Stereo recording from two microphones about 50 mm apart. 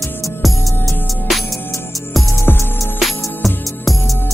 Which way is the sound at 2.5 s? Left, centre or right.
Left.